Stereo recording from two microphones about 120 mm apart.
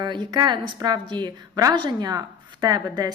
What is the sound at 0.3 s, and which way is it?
A woman's voice, 35° right (ahead or behind).